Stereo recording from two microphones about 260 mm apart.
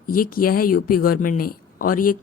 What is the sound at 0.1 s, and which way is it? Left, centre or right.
Speech, left.